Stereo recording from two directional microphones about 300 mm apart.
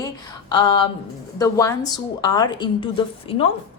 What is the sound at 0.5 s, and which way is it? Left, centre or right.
A woman's voice, centre.